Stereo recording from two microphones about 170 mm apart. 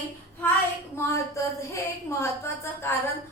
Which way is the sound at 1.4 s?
15° left (ahead or behind).